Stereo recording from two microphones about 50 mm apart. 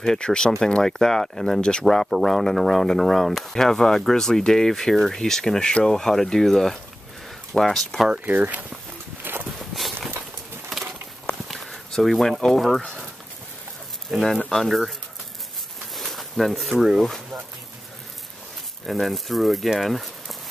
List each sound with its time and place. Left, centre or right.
0.0 s speech: centre
8.3 s speech: right
9.2 s walk: right
9.6 s walk: centre
11.4 s a sound: centre
11.9 s speech: centre
14.1 s speech: centre
15.9 s a sound: centre
18.9 s speech: centre